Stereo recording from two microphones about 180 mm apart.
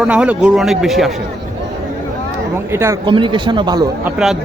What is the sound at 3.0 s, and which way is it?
Speech, 25° right (ahead or behind).